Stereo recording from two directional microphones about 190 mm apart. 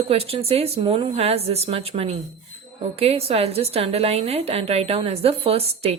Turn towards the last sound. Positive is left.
turn(degrees=-30)  # may be behind; listen again after turning